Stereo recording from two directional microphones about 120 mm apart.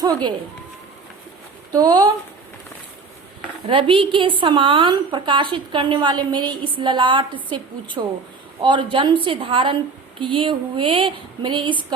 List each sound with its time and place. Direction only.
0.0 s speech: 35° right (ahead or behind)
1.7 s speech: 35° right (ahead or behind)
3.7 s a woman's voice: 45° right (ahead or behind)